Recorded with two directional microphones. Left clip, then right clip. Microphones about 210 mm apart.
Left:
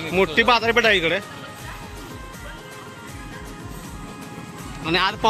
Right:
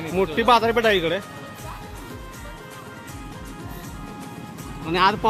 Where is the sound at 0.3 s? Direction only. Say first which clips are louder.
Right 1 dB; 10° right (ahead or behind).